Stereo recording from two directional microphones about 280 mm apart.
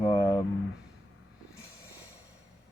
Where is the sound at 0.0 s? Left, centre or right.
Centre.